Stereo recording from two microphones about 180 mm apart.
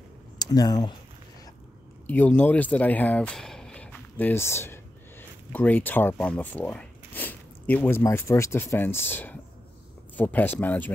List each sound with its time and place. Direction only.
0.4 s speech: 20° left (ahead or behind)
2.0 s speech: 10° left (ahead or behind)